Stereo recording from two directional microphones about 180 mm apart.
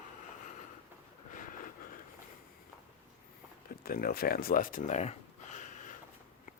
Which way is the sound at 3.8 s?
55° left (ahead or behind).